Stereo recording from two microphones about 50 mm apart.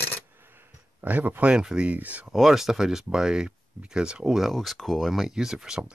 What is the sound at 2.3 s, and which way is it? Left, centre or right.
Speech, centre.